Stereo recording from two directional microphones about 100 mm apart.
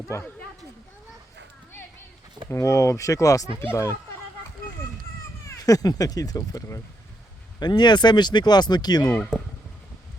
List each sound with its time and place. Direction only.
0.1 s speech: 25° left (ahead or behind)
2.5 s speech: 30° left (ahead or behind)
3.6 s speech: 20° left (ahead or behind)
5.6 s speech: 40° left (ahead or behind)
7.6 s speech: 45° left (ahead or behind)